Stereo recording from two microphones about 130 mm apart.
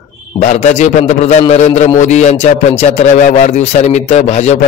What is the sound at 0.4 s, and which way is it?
Speech, 65° left (ahead or behind).